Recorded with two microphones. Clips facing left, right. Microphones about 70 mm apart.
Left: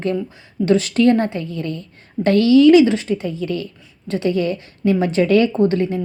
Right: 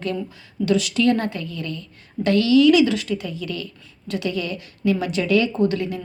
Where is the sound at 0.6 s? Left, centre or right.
Left.